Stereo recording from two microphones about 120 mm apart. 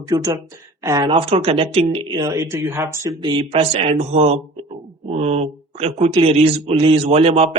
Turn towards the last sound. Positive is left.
turn(degrees=-55)  # may be behind; listen again after turning